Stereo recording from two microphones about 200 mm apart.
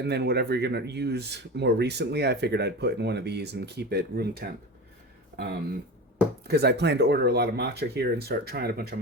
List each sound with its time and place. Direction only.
0.0 s speech: 55° right (ahead or behind)
6.5 s speech: 55° right (ahead or behind)